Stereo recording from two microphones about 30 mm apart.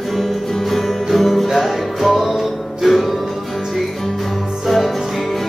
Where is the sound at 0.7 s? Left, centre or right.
Centre.